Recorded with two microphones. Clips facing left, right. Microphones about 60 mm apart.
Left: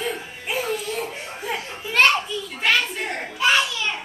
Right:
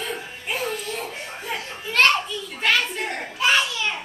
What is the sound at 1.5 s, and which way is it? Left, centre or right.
Children playing, centre.